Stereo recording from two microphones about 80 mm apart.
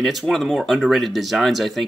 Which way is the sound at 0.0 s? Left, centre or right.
Centre.